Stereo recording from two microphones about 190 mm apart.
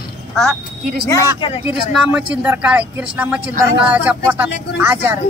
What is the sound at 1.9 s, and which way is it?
Speech, 5° right (ahead or behind).